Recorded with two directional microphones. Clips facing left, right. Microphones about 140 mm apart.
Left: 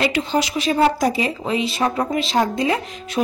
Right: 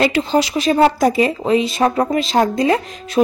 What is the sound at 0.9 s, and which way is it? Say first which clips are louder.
A woman's voice: right 5 dB; 50° right (ahead or behind).